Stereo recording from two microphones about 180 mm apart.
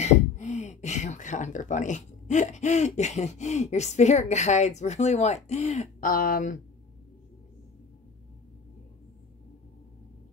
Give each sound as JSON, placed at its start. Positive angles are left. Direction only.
{"t": 0.0, "sound": "speech", "side_deg": 40}